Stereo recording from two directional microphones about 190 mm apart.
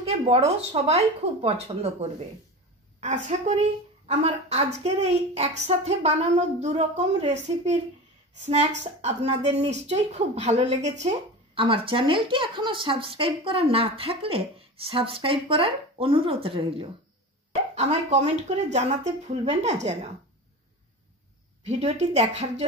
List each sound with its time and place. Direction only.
0.0 s a woman's voice: 30° right (ahead or behind)
8.8 s a woman's voice: 35° right (ahead or behind)
21.6 s a woman's voice: 35° right (ahead or behind)